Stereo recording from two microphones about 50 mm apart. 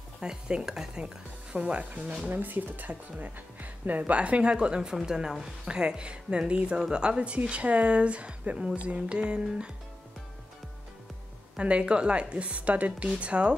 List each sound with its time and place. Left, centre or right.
0.2 s a woman's voice: centre; by 4.0 s right
4.0 s a woman's voice: right
11.5 s a woman's voice: right